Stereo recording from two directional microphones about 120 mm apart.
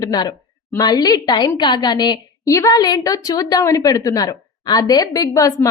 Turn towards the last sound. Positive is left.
turn(degrees=30)  # may be behind; listen again after turning